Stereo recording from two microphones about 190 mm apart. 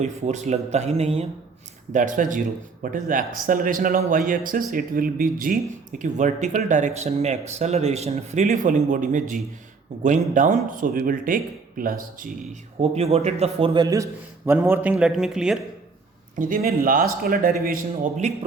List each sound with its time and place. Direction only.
0.0 s a man's voice: 35° right (ahead or behind)
12.8 s a man's voice: 30° right (ahead or behind); by 15.5 s 5° right (ahead or behind)
16.4 s a man's voice: 50° right (ahead or behind)